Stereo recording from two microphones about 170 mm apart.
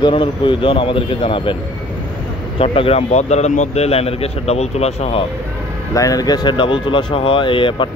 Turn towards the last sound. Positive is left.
turn(degrees=30)  # may be behind; listen again after turning